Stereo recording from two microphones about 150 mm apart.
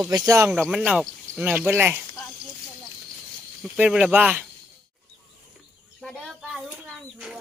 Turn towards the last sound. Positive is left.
turn(degrees=-5)  # may be behind; listen again after turning